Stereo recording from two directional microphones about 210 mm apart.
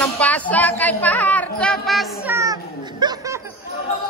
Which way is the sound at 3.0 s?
20° right (ahead or behind).